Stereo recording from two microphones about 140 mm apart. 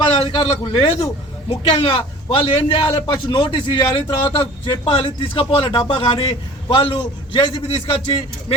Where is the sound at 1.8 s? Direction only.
40° left (ahead or behind).